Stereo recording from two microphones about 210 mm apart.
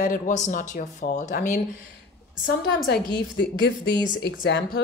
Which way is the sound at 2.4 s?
45° left (ahead or behind).